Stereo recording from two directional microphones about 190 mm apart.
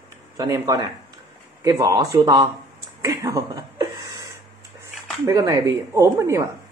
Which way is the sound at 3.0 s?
20° right (ahead or behind).